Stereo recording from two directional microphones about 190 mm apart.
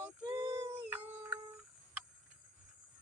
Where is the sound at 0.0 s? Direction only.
15° right (ahead or behind).